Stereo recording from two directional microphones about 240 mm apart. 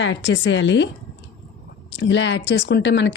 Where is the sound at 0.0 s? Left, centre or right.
Left.